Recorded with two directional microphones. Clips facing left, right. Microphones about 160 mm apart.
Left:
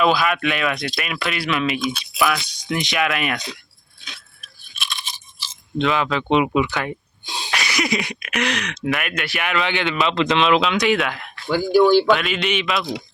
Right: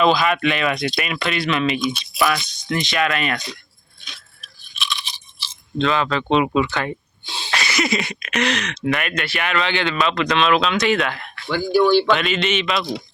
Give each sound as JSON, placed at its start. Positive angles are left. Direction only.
{"t": 0.0, "sound": "speech", "side_deg": 5}
{"t": 2.5, "sound": "speech", "side_deg": 15}
{"t": 4.7, "sound": "crunch", "side_deg": 50}
{"t": 6.3, "sound": "speech", "side_deg": 15}
{"t": 10.8, "sound": "speech", "side_deg": 0}